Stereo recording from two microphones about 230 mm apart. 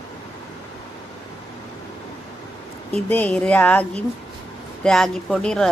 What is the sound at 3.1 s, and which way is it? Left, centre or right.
Speech, centre.